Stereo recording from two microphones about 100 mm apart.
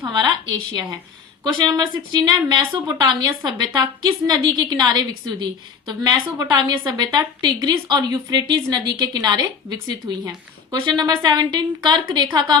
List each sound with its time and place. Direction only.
0.1 s a woman's voice: 45° right (ahead or behind)
1.5 s a woman's voice: 50° right (ahead or behind)